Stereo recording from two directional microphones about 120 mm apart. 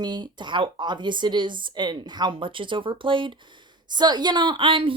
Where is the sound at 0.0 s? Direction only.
40° right (ahead or behind).